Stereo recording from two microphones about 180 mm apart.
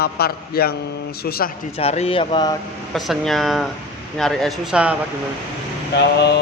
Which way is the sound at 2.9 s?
Centre (ahead or behind).